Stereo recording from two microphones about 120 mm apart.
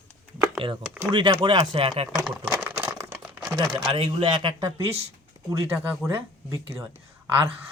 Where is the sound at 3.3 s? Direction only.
15° right (ahead or behind).